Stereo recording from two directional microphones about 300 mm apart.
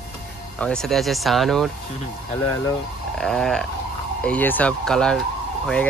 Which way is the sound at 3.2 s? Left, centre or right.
Centre.